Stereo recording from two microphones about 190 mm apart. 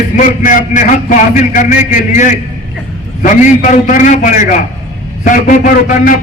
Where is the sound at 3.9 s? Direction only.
40° left (ahead or behind).